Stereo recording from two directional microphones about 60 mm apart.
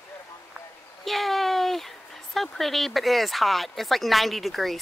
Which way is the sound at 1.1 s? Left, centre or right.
Centre.